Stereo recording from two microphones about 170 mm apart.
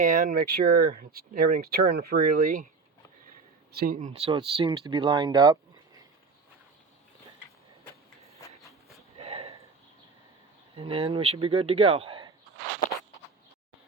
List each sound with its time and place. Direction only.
0.1 s speech: 50° right (ahead or behind)
1.7 s speech: 70° right (ahead or behind)
3.7 s speech: 70° right (ahead or behind)
3.9 s speech: 45° right (ahead or behind)
4.3 s speech: 30° right (ahead or behind)
9.1 s a sound: 35° right (ahead or behind)
10.8 s speech: 35° right (ahead or behind)